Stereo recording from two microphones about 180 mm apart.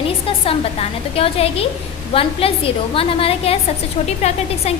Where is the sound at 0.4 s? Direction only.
30° left (ahead or behind).